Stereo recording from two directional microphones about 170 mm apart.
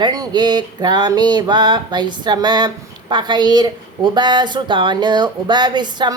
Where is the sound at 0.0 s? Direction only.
25° right (ahead or behind).